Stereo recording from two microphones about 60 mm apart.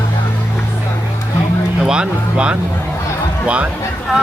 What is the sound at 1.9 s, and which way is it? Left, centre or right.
Speech, centre.